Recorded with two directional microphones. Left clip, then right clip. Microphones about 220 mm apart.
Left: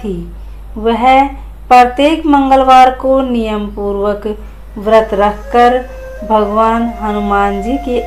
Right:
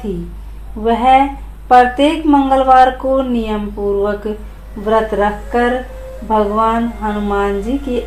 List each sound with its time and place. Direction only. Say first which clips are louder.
0.8 s speech: left 2 dB; 25° left (ahead or behind)